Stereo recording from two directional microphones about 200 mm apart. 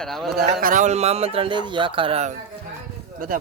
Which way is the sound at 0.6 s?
40° right (ahead or behind).